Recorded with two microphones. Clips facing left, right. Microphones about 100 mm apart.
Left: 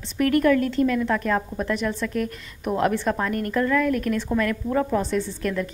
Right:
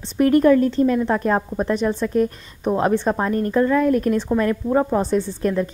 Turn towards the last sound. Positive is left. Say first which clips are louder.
# right 5 dB
turn(degrees=-35)  # may be behind; listen again after turning